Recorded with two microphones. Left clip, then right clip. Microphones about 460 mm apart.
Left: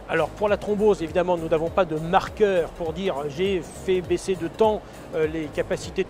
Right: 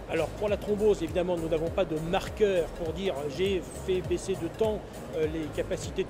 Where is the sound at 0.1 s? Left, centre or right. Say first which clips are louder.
Left 7 dB; left.